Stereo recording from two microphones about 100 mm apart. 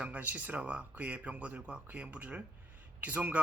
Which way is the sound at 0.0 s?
15° right (ahead or behind).